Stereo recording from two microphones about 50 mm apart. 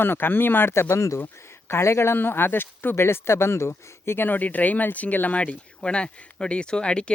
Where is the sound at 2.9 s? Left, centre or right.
Left; by 7.1 s centre.